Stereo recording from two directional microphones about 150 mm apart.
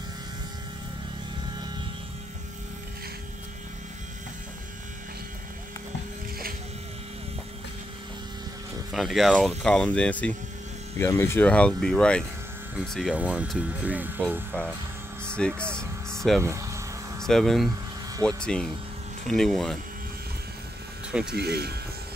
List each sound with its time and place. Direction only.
8.9 s speech: centre (ahead or behind)
15.3 s speech: 5° left (ahead or behind)
16.3 s speech: 20° right (ahead or behind)
17.2 s hum: 5° left (ahead or behind)
18.2 s speech: 5° left (ahead or behind)
21.3 s speech: 90° right